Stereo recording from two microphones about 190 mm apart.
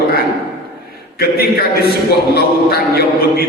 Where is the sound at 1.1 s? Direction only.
55° left (ahead or behind).